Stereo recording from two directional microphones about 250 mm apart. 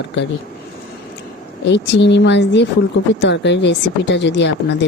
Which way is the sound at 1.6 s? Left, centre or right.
Left.